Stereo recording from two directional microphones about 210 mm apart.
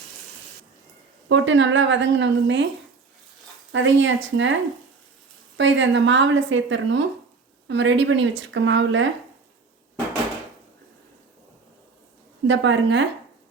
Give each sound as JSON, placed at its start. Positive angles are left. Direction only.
{"t": 1.3, "sound": "a woman's voice", "side_deg": -65}
{"t": 3.7, "sound": "a woman's voice", "side_deg": -60}
{"t": 12.5, "sound": "a woman's voice", "side_deg": -60}